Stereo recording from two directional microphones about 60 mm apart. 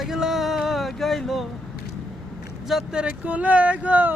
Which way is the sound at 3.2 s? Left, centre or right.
Right.